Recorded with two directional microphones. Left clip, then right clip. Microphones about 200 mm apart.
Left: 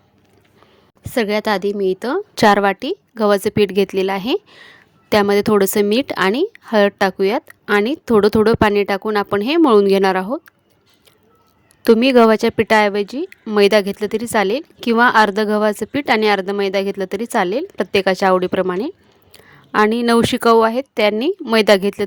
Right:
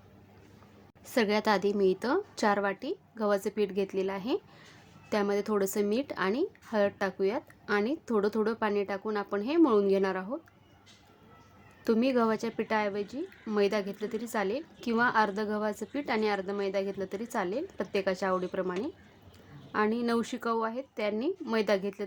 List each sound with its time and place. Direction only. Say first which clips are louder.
1.0 s a woman's voice: left 9 dB; 30° left (ahead or behind)
11.8 s a woman's voice: left 16 dB; 45° left (ahead or behind)